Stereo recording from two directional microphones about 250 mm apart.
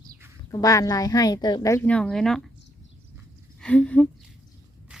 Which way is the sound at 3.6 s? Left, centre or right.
Centre.